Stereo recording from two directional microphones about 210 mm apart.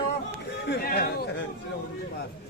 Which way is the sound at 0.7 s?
50° left (ahead or behind).